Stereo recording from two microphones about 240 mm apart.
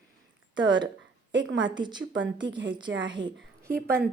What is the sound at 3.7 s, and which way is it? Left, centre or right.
Speech, right.